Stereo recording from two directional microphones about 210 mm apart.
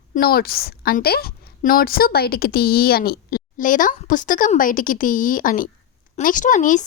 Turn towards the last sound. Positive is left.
turn(degrees=35)  # may be behind; listen again after turning